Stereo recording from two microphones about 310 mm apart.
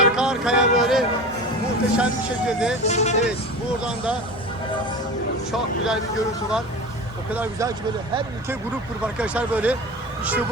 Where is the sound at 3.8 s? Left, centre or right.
Centre.